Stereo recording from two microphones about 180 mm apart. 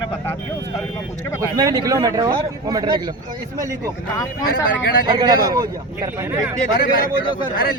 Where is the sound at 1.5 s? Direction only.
20° right (ahead or behind).